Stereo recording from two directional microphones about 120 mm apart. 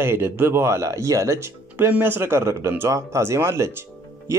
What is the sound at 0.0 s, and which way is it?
Speech, 20° right (ahead or behind).